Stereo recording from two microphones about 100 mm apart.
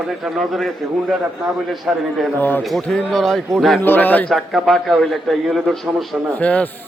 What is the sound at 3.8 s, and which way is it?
Speech, 20° left (ahead or behind).